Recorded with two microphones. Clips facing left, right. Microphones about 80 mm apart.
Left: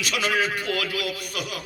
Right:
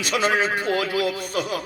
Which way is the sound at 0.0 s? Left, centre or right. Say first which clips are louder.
Right 3 dB; right.